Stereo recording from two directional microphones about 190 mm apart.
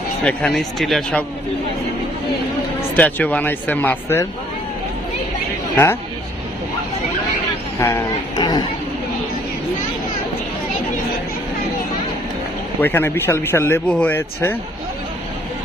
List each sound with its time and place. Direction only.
0.2 s speech: 5° left (ahead or behind)
2.9 s speech: 10° left (ahead or behind)
5.7 s speech: 10° left (ahead or behind)
7.8 s a sound: 15° left (ahead or behind)
12.8 s speech: 10° left (ahead or behind)